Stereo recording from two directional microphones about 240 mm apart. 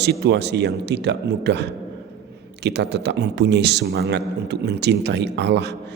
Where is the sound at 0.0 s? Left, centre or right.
Right.